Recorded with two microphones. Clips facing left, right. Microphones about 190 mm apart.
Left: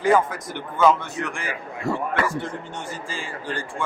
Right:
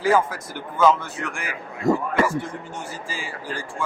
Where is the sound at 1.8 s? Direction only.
40° right (ahead or behind).